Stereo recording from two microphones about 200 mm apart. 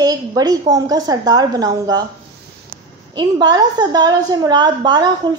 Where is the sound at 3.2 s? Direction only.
20° right (ahead or behind).